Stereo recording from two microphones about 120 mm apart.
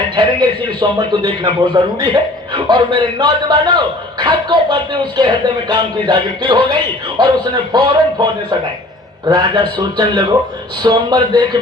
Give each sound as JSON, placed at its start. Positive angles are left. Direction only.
{"t": 0.2, "sound": "a man's voice", "side_deg": -35}